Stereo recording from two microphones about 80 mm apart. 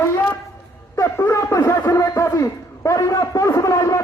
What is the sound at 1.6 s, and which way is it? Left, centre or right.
Speech, left.